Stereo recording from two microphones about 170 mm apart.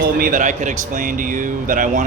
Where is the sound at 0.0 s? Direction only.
55° right (ahead or behind).